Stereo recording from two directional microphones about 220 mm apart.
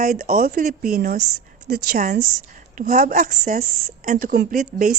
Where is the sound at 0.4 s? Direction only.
40° right (ahead or behind).